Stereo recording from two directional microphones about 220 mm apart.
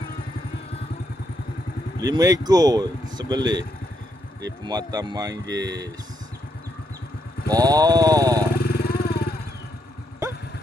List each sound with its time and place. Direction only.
2.0 s speech: 15° right (ahead or behind)
7.4 s speech: 15° right (ahead or behind)
8.5 s vehicle: 45° left (ahead or behind)